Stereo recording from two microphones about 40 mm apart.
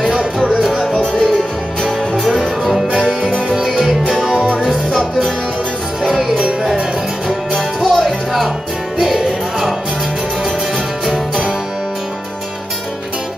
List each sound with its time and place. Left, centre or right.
0.4 s music: centre
1.1 s music: centre
2.9 s music: centre
6.0 s music: centre
6.3 s music: centre
7.5 s music: centre
8.0 s music: centre